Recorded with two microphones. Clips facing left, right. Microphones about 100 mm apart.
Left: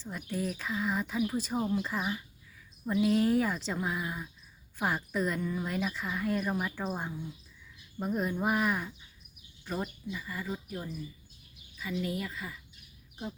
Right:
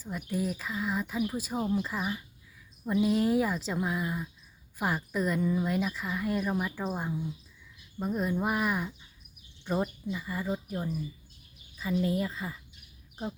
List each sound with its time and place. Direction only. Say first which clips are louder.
0.0 s a woman's voice: right 2 dB; 5° right (ahead or behind)
5.4 s speech: right 5 dB; 15° right (ahead or behind)
5.6 s a woman's voice: right 3 dB; centre (ahead or behind)
9.8 s speech: right 4 dB; 20° right (ahead or behind)